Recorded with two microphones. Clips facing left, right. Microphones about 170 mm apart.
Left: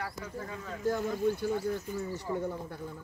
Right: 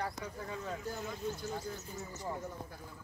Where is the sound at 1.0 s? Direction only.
55° left (ahead or behind).